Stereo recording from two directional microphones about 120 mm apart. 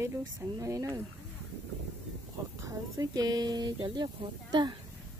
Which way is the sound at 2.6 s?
30° right (ahead or behind).